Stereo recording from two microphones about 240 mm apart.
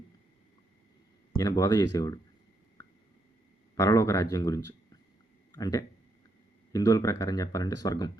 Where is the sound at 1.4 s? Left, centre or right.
Centre.